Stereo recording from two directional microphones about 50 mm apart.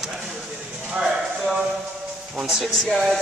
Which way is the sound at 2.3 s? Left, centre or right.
Centre.